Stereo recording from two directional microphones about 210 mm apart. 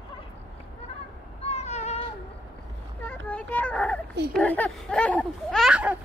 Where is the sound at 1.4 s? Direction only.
30° left (ahead or behind).